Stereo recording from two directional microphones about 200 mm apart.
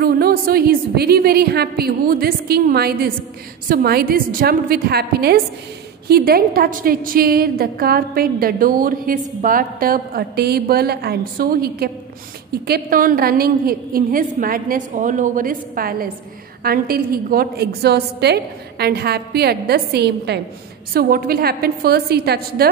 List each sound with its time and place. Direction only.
0.0 s a woman's voice: 50° right (ahead or behind)